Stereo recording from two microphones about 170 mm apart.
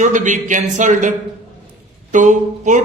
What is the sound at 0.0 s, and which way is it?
A man's voice, 45° right (ahead or behind).